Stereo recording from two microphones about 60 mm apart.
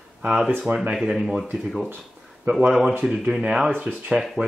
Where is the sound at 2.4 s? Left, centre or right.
Centre.